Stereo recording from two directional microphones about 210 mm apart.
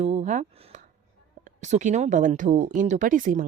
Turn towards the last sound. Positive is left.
turn(degrees=-40)  # may be behind; listen again after turning